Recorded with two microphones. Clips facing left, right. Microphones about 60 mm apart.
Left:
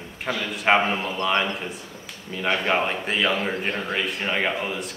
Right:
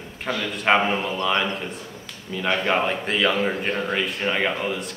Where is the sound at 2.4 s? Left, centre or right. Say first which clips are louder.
Right 1 dB; centre.